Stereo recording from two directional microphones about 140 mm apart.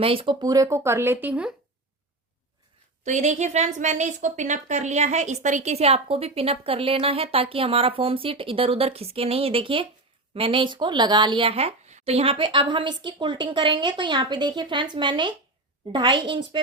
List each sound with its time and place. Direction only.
0.0 s speech: 40° right (ahead or behind); by 1.5 s 10° right (ahead or behind)
3.0 s a woman's voice: 55° right (ahead or behind); by 16.6 s 35° right (ahead or behind)